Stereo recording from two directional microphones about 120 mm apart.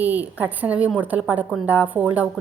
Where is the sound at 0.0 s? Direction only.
15° right (ahead or behind).